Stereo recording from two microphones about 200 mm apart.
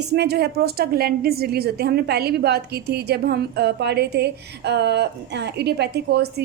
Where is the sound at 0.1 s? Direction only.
55° right (ahead or behind).